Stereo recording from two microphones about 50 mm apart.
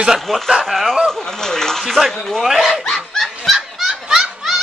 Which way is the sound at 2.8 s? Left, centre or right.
Centre.